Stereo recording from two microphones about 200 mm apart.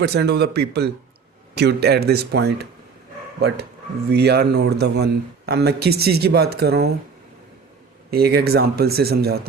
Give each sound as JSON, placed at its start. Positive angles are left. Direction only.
{"t": 0.0, "sound": "a man's voice", "side_deg": -55}
{"t": 4.1, "sound": "a man's voice", "side_deg": -55}
{"t": 8.1, "sound": "a man's voice", "side_deg": -50}